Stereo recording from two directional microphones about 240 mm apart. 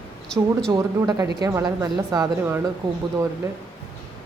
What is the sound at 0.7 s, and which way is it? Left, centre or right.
A woman's voice, centre.